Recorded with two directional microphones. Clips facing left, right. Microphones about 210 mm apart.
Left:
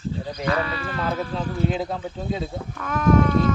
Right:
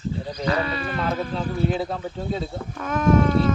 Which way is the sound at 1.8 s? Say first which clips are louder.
Even; 15° left (ahead or behind).